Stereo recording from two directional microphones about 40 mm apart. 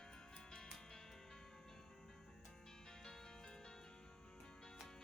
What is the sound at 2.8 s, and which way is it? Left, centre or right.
Music, centre.